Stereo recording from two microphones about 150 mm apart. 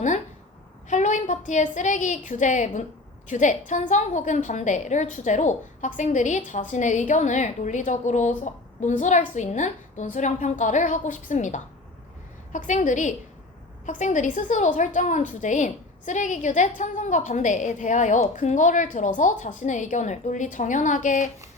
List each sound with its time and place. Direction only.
0.9 s a woman's voice: 55° left (ahead or behind)